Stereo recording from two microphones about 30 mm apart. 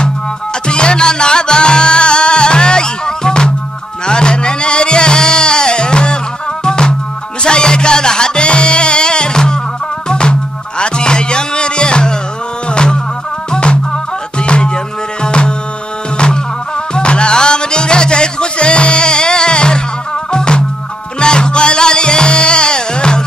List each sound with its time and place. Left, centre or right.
0.7 s music: left
16.9 s music: left